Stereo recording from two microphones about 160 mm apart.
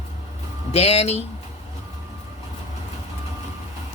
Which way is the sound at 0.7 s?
40° left (ahead or behind).